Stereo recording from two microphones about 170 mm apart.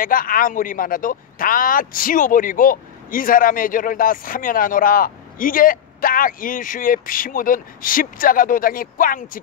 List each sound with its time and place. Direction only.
0.0 s speech: 55° left (ahead or behind)